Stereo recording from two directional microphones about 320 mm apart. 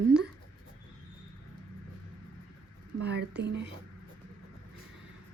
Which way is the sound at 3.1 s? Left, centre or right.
Right.